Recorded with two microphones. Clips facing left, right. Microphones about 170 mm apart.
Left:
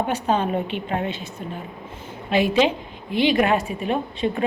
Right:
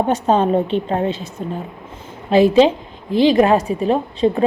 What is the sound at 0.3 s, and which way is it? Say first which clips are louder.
Speech: right 7 dB; 40° right (ahead or behind).